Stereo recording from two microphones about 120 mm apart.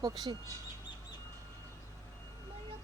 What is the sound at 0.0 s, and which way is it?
Speech, 35° right (ahead or behind).